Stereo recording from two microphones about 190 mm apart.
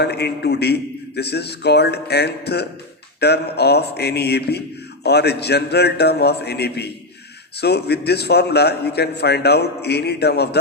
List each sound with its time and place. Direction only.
0.0 s a man's voice: 60° left (ahead or behind)